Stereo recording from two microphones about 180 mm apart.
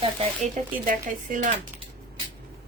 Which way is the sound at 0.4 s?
45° right (ahead or behind).